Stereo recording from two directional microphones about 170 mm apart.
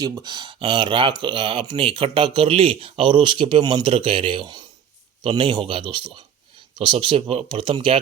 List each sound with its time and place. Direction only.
0.0 s speech: 20° right (ahead or behind)